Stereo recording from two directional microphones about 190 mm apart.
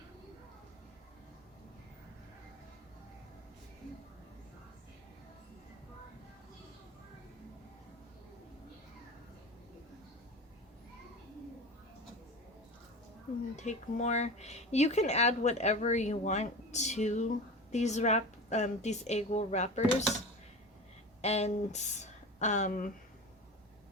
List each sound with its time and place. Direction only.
13.6 s speech: 40° left (ahead or behind)
21.2 s speech: 35° left (ahead or behind)